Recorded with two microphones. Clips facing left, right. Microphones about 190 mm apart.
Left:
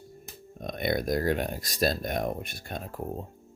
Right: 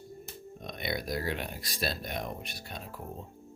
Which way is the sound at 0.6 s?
50° left (ahead or behind).